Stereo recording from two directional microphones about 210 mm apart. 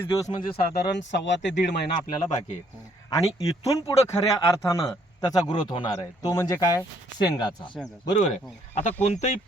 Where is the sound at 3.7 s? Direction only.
15° left (ahead or behind).